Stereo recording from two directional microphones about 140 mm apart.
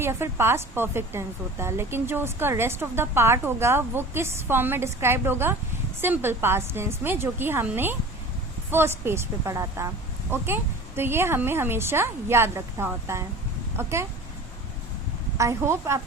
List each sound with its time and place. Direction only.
0.0 s a woman's voice: 15° right (ahead or behind)
15.4 s a woman's voice: 20° right (ahead or behind)